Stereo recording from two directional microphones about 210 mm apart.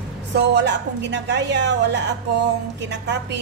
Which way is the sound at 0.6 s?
55° right (ahead or behind).